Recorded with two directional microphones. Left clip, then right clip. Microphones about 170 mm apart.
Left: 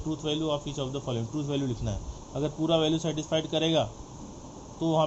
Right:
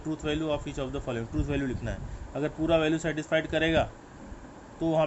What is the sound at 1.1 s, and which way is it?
Speech, 30° right (ahead or behind).